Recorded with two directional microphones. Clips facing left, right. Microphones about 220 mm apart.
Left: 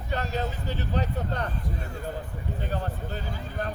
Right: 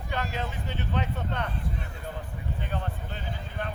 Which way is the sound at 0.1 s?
40° left (ahead or behind).